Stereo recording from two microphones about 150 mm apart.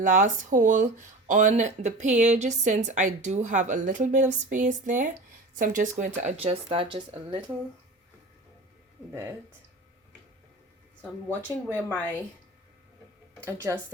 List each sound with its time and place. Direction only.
0.0 s speech: 60° right (ahead or behind)
6.1 s speech: 45° right (ahead or behind)
11.0 s a woman's voice: 10° left (ahead or behind)
13.4 s speech: 20° right (ahead or behind)